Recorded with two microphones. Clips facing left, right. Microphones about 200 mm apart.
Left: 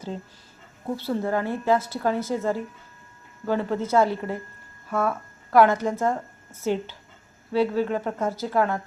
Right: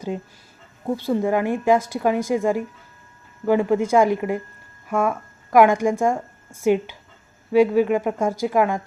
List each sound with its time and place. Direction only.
0.9 s a woman's voice: 15° right (ahead or behind)